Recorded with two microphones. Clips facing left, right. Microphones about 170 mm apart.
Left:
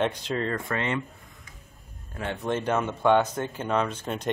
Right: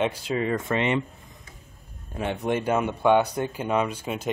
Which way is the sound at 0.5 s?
20° right (ahead or behind).